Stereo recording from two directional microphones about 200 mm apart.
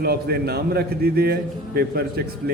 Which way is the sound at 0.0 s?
50° right (ahead or behind).